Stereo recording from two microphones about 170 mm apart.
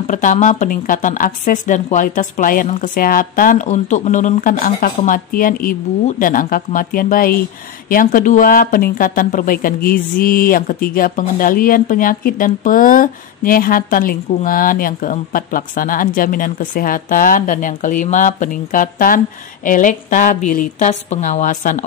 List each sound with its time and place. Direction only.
0.0 s a woman's voice: 50° left (ahead or behind)